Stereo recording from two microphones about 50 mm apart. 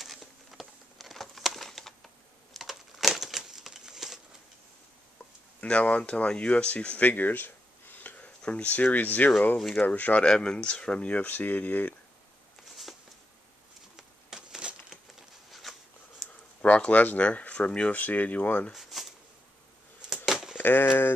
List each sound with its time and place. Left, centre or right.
0.0 s a sound: centre
2.6 s crumpling: centre
5.6 s speech: left
7.1 s a sound: left
8.4 s speech: left
10.2 s speech: centre
11.2 s speech: left
13.9 s a sound: centre
15.7 s a sound: centre
16.6 s speech: left
18.7 s speech: centre
20.5 s speech: left